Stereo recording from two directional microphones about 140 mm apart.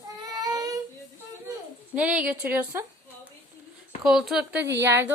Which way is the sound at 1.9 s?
10° right (ahead or behind).